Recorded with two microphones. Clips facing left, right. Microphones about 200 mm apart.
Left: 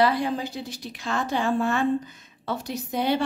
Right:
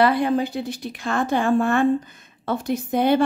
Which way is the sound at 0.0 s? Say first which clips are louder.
Right 4 dB; 55° right (ahead or behind).